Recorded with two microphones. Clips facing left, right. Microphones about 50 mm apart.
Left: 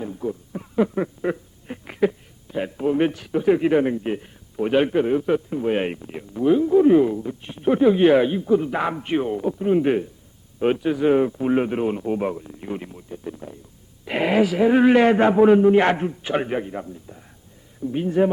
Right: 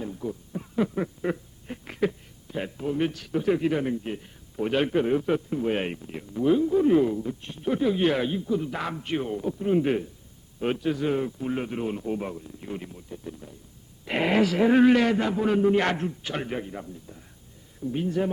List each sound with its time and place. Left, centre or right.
0.0 s a sound: centre
2.7 s a sound: left
3.3 s a man's voice: centre
4.5 s a man's voice: centre; by 13.6 s left
14.0 s speech: centre
14.8 s a man's voice: left
15.4 s a man's voice: centre